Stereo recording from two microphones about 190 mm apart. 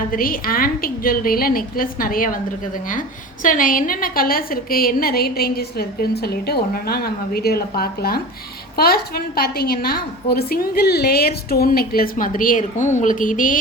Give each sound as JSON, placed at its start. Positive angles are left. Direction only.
{"t": 0.1, "sound": "a woman's voice", "side_deg": 50}
{"t": 3.4, "sound": "a woman's voice", "side_deg": 45}